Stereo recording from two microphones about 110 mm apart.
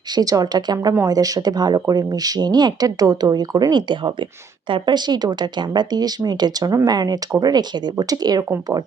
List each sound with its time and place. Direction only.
0.2 s speech: 35° right (ahead or behind)